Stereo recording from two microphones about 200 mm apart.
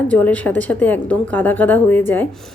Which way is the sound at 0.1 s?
5° left (ahead or behind).